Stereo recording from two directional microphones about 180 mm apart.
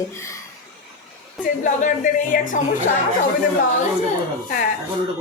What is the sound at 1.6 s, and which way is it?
Speech, 45° left (ahead or behind).